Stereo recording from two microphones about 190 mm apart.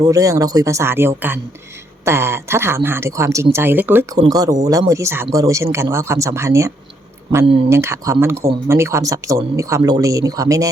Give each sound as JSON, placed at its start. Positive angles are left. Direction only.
{"t": 0.0, "sound": "speech", "side_deg": -15}